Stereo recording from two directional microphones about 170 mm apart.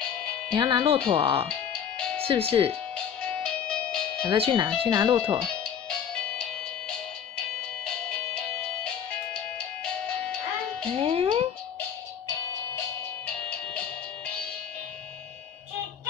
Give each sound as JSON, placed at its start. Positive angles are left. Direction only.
{"t": 0.6, "sound": "speech", "side_deg": -30}
{"t": 3.3, "sound": "music", "side_deg": 5}
{"t": 4.3, "sound": "speech", "side_deg": -30}
{"t": 5.0, "sound": "speech", "side_deg": -15}
{"t": 5.4, "sound": "music", "side_deg": 5}
{"t": 11.0, "sound": "music", "side_deg": -35}